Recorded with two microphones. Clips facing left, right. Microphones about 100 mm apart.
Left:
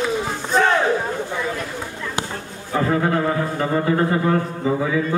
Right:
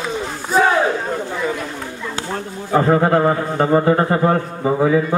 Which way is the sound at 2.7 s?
40° right (ahead or behind).